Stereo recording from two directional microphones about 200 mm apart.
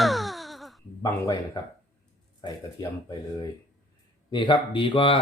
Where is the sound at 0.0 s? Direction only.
Centre (ahead or behind).